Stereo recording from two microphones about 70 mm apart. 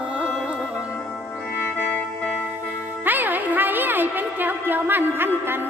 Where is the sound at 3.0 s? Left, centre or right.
Right.